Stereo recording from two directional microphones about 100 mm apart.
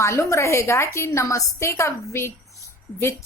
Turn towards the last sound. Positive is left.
turn(degrees=30)  # may be behind; listen again after turning